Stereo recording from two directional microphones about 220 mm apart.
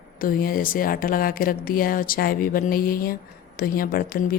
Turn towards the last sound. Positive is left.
turn(degrees=40)  # may be behind; listen again after turning